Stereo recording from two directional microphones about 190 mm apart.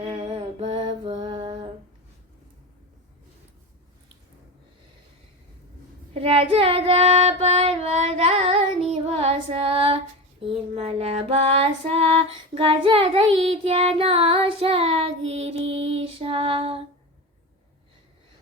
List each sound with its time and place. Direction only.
0.1 s music: 25° right (ahead or behind)
6.1 s child singing: 30° right (ahead or behind)
10.4 s female singing: 30° right (ahead or behind)